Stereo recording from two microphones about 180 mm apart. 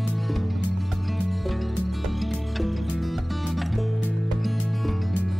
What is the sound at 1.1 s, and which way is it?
Music, centre (ahead or behind).